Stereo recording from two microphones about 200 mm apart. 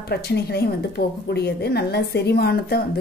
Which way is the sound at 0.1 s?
55° left (ahead or behind).